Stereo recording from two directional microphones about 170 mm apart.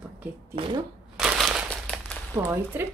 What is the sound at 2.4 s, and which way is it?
Speech, 15° right (ahead or behind).